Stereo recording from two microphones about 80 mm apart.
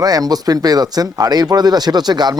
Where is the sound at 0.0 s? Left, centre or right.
Right.